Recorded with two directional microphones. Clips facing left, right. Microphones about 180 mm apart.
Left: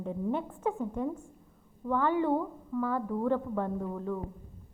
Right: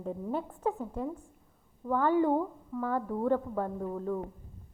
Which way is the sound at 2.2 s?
15° right (ahead or behind).